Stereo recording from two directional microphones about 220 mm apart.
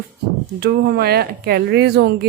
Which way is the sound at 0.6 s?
45° right (ahead or behind).